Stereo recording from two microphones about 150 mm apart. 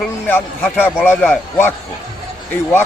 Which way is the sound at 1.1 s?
15° left (ahead or behind).